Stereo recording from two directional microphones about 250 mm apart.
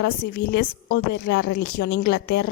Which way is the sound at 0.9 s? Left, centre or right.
Left.